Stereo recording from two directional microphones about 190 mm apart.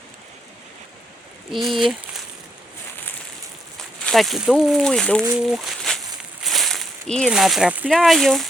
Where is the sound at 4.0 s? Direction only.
Centre (ahead or behind).